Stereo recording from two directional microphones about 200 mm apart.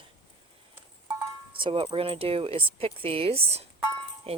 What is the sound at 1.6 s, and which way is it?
Speech, 25° right (ahead or behind).